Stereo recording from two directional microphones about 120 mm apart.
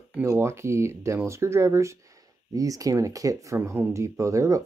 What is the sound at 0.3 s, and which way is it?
Speech, 20° right (ahead or behind).